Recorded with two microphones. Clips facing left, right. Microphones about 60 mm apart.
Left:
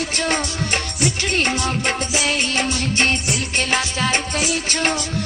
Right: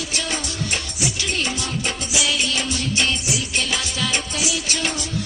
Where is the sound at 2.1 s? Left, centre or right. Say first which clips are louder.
Right 1 dB; left.